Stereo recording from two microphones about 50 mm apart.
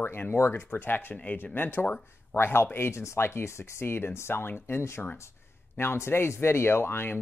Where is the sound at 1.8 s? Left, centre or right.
Left.